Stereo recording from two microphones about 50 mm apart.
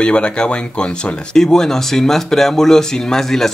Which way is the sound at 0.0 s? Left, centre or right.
Centre.